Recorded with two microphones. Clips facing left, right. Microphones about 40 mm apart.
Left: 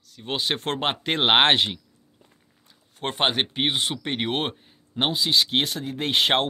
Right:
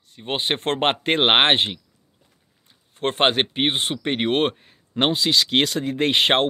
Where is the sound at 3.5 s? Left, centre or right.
Right.